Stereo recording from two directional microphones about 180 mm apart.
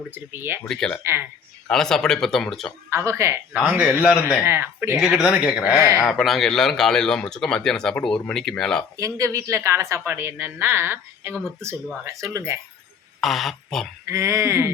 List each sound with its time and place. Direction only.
0.1 s a woman's voice: 10° right (ahead or behind)
0.6 s speech: 5° left (ahead or behind)
1.0 s a woman's voice: 15° right (ahead or behind)
1.6 s speech: 5° left (ahead or behind)
2.9 s a woman's voice: 15° right (ahead or behind)
4.9 s a woman's voice: centre (ahead or behind)
6.1 s speech: centre (ahead or behind)
9.0 s a woman's voice: 15° right (ahead or behind)
13.2 s speech: centre (ahead or behind)
14.1 s a woman's voice: 15° right (ahead or behind)